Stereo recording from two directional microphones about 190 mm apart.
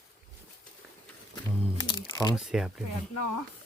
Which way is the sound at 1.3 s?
20° left (ahead or behind).